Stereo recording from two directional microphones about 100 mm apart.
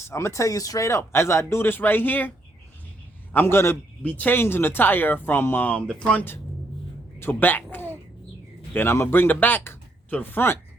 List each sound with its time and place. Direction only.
0.0 s speech: 30° left (ahead or behind)
3.3 s speech: 25° left (ahead or behind)
7.2 s speech: 20° left (ahead or behind)